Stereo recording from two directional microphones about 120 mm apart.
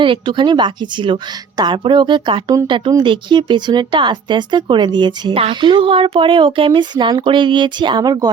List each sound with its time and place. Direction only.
0.0 s speech: 45° right (ahead or behind)